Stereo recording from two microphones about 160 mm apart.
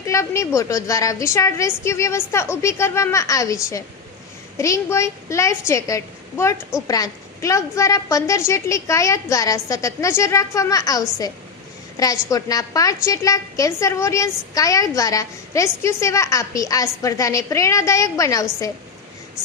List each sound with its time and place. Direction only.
0.0 s a woman's voice: 20° left (ahead or behind)
12.3 s a woman's voice: 20° left (ahead or behind)